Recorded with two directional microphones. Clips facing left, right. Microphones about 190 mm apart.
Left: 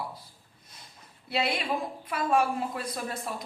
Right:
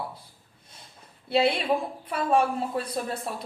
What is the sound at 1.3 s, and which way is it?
A woman's voice, 30° right (ahead or behind).